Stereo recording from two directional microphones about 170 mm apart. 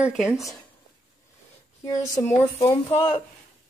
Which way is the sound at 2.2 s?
40° left (ahead or behind).